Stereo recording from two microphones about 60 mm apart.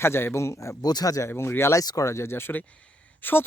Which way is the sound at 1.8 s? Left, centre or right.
Left.